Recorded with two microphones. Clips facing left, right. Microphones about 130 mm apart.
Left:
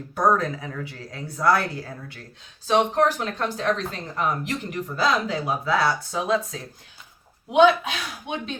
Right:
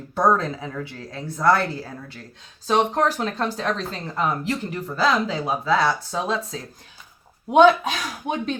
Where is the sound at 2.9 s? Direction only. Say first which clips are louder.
Even; 35° right (ahead or behind).